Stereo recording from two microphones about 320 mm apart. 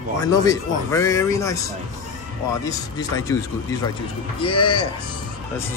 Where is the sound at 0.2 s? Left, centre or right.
Centre.